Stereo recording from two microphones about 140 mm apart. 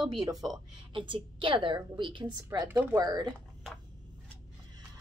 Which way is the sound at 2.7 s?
15° right (ahead or behind).